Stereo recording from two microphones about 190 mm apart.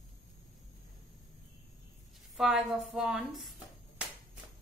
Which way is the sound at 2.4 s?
Centre (ahead or behind).